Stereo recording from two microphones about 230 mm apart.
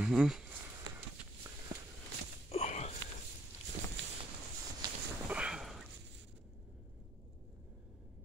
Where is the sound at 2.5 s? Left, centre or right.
Left.